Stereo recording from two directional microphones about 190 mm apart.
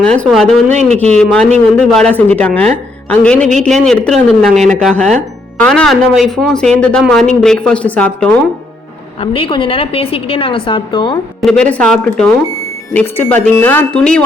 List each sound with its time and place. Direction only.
0.0 s speech: 5° left (ahead or behind)
0.7 s a man's voice: 35° right (ahead or behind)
1.1 s speech: 5° left (ahead or behind)
9.2 s a woman's voice: 30° left (ahead or behind)
11.3 s speech: 5° left (ahead or behind)